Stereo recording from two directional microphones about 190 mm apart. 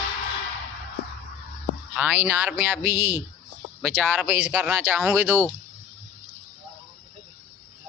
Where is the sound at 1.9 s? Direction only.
10° right (ahead or behind).